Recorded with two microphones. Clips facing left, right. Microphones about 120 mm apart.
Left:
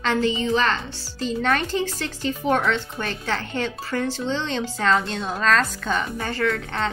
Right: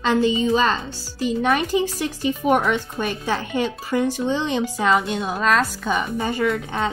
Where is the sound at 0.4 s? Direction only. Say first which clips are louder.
Right 3 dB; 15° right (ahead or behind).